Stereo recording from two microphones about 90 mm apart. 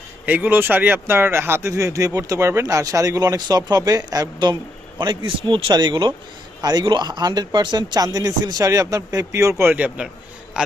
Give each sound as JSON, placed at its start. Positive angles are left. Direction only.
{"t": 0.3, "sound": "speech", "side_deg": -20}
{"t": 4.9, "sound": "speech", "side_deg": -60}
{"t": 6.6, "sound": "speech", "side_deg": -50}
{"t": 9.7, "sound": "a man's voice", "side_deg": -15}